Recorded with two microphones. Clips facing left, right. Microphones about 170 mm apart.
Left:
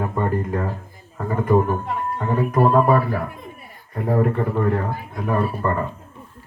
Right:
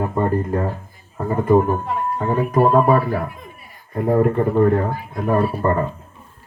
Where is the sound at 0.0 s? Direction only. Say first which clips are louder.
Right 3 dB; 20° right (ahead or behind).